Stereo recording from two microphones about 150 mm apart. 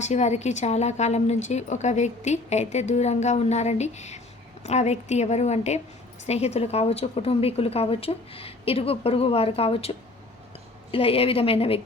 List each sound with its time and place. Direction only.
0.0 s a woman's voice: 50° left (ahead or behind)
10.9 s a woman's voice: 40° left (ahead or behind)